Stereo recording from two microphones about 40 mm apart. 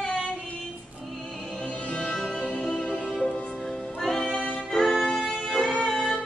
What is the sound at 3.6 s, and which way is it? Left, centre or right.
Music, centre.